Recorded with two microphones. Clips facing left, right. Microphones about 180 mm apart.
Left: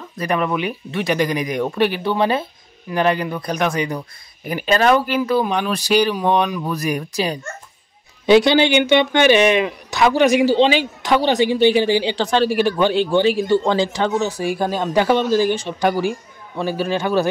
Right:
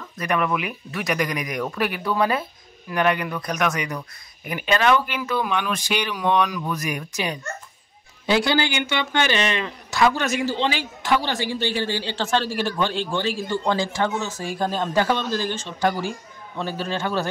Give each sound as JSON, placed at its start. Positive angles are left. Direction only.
{"t": 0.2, "sound": "speech", "side_deg": 30}
{"t": 8.3, "sound": "speech", "side_deg": 20}